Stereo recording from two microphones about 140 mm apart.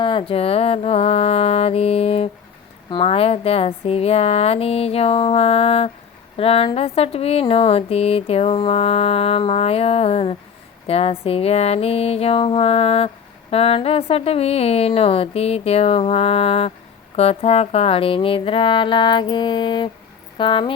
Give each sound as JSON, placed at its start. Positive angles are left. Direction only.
{"t": 0.0, "sound": "speech", "side_deg": 40}
{"t": 17.2, "sound": "music", "side_deg": 45}